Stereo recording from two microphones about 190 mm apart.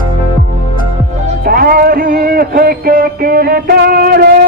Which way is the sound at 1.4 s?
50° right (ahead or behind).